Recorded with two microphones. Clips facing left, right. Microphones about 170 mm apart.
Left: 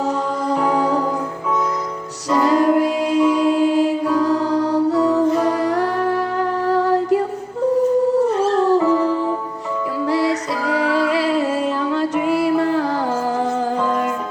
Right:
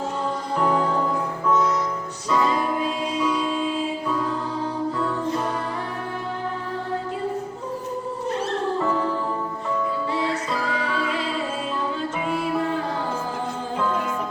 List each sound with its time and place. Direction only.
2.4 s music: 75° left (ahead or behind)
3.2 s music: 5° left (ahead or behind)
3.5 s music: 75° left (ahead or behind)
8.5 s music: 85° left
10.1 s music: 80° left